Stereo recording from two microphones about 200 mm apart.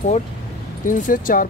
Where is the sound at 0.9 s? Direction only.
40° left (ahead or behind).